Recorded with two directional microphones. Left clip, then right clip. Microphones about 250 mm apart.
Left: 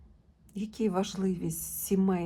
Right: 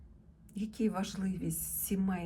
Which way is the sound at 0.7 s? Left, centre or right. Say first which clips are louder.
Left 6 dB; centre.